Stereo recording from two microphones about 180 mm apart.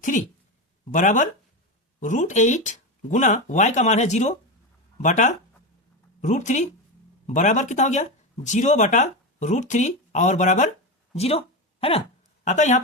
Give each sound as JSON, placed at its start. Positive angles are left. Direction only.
{"t": 0.0, "sound": "speech", "side_deg": 45}
{"t": 11.1, "sound": "a sound", "side_deg": 35}
{"t": 12.5, "sound": "speech", "side_deg": 40}